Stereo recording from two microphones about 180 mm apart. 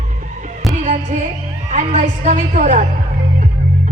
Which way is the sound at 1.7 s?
40° right (ahead or behind).